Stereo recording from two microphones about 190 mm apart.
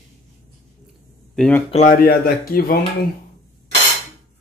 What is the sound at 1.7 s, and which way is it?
Speech, 45° left (ahead or behind).